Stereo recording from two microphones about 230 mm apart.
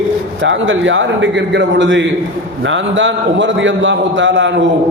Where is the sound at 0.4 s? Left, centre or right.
Right.